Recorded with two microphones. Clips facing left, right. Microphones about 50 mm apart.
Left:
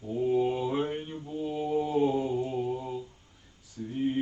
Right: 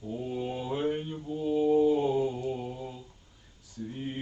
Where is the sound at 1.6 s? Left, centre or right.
Centre.